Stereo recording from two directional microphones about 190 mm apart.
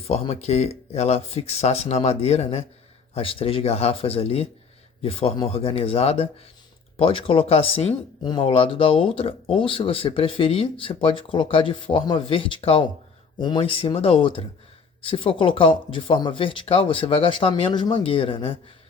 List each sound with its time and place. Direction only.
0.1 s speech: 35° left (ahead or behind)